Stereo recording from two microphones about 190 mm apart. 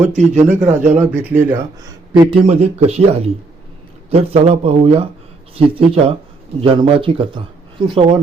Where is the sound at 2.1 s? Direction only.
25° right (ahead or behind).